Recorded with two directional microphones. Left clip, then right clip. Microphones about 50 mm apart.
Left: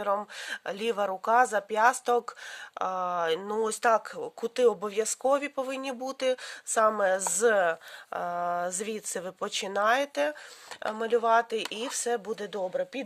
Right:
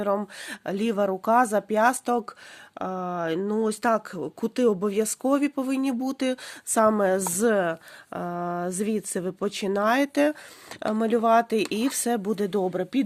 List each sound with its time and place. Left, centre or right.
0.0 s speech: centre
1.2 s speech: right
2.7 s speech: left
3.8 s speech: centre
5.2 s speech: right
6.7 s speech: right
7.5 s speech: centre
9.8 s speech: right
10.9 s speech: right